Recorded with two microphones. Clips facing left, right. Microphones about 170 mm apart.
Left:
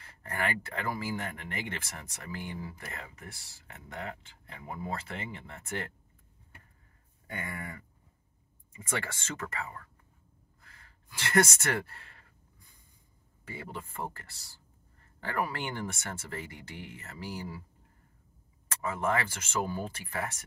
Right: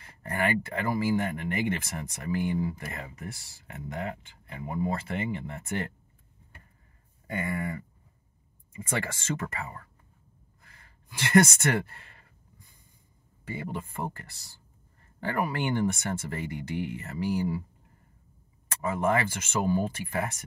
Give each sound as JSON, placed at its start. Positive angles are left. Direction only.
{"t": 0.0, "sound": "speech", "side_deg": -15}
{"t": 7.3, "sound": "speech", "side_deg": -5}
{"t": 11.1, "sound": "speech", "side_deg": -10}
{"t": 13.6, "sound": "speech", "side_deg": -15}
{"t": 15.2, "sound": "speech", "side_deg": -15}
{"t": 18.8, "sound": "speech", "side_deg": -10}